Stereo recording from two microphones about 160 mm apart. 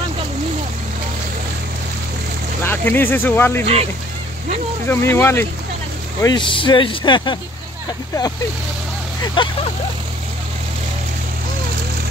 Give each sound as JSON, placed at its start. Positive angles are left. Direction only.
{"t": 2.6, "sound": "speech", "side_deg": 15}
{"t": 4.8, "sound": "speech", "side_deg": 15}
{"t": 6.2, "sound": "speech", "side_deg": 30}
{"t": 9.2, "sound": "speech", "side_deg": 30}